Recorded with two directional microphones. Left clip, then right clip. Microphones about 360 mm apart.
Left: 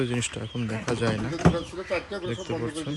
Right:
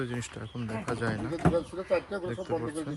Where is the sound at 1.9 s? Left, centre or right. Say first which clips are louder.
Even; right.